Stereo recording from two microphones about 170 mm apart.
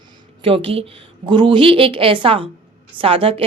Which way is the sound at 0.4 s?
35° right (ahead or behind).